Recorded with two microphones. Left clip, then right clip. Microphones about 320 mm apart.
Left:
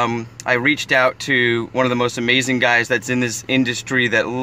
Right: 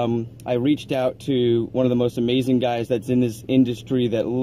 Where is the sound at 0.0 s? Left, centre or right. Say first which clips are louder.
Left 4 dB; left.